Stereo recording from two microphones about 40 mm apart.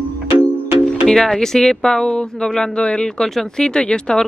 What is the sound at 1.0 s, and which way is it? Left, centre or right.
Speech, centre.